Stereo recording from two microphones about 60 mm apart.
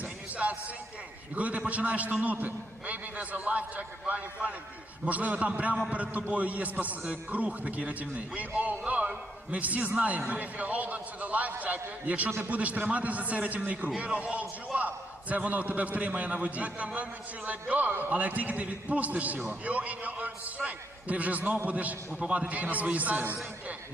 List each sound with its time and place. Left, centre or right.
0.0 s music: right
1.3 s a man's voice: right